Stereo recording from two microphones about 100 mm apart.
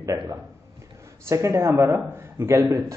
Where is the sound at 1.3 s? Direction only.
35° right (ahead or behind).